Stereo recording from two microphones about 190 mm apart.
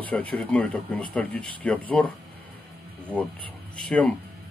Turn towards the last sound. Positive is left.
turn(degrees=5)  # may be behind; listen again after turning